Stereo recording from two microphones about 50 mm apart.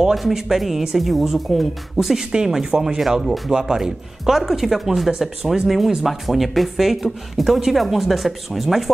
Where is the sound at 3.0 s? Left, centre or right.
Centre.